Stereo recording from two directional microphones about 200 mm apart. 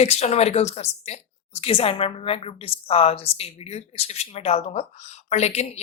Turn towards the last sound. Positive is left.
turn(degrees=35)  # may be behind; listen again after turning